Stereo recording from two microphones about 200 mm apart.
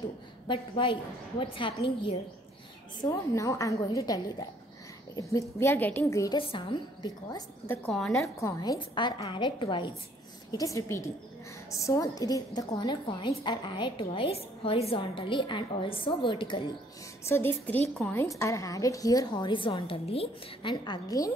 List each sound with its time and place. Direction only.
0.8 s a woman's voice: 25° left (ahead or behind)
3.0 s a woman's voice: 15° left (ahead or behind)
6.4 s a woman's voice: 25° left (ahead or behind); by 8.1 s 5° left (ahead or behind)
8.1 s a woman's voice: 15° left (ahead or behind)
17.3 s a woman's voice: 10° left (ahead or behind)